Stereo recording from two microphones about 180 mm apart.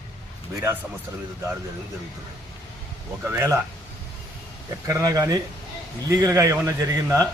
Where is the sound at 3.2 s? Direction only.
15° right (ahead or behind).